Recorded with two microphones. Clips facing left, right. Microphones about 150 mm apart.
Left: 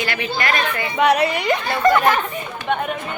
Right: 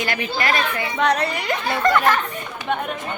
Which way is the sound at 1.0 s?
10° left (ahead or behind).